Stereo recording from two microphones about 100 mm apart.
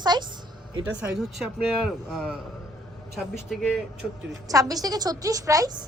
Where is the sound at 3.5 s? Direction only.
5° right (ahead or behind).